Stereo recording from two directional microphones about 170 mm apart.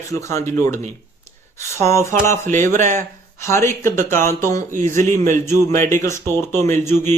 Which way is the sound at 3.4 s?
15° left (ahead or behind).